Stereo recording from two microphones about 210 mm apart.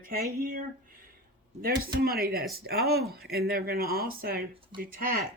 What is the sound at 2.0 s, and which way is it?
Speech, 45° right (ahead or behind).